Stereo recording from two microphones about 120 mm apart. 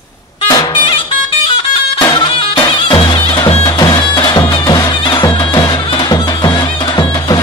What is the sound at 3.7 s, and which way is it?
Music, 40° left (ahead or behind).